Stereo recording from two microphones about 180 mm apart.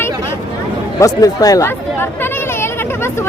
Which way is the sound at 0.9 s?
20° left (ahead or behind).